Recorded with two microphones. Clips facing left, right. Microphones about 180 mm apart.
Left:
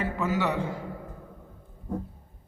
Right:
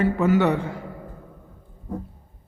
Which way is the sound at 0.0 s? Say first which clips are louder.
Right 8 dB; 60° right (ahead or behind).